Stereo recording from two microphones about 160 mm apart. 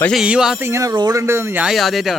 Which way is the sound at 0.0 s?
Centre (ahead or behind).